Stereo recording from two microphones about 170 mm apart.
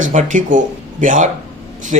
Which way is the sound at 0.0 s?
45° right (ahead or behind).